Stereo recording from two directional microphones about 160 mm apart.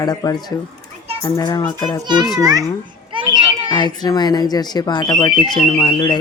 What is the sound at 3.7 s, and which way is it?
Speech, 25° left (ahead or behind).